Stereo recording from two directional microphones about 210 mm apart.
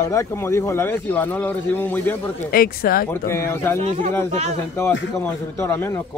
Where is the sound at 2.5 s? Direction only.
45° left (ahead or behind).